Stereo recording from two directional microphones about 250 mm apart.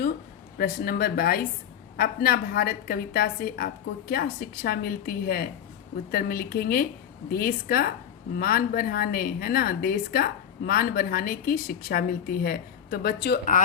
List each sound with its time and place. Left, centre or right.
0.6 s a woman's voice: left